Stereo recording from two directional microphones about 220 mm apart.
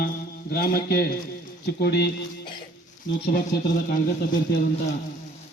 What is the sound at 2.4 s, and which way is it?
Cough, 20° left (ahead or behind).